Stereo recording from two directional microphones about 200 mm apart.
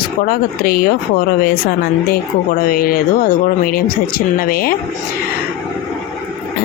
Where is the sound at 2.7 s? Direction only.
45° left (ahead or behind).